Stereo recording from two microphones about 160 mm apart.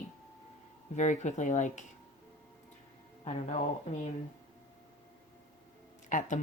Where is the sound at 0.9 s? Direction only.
50° left (ahead or behind).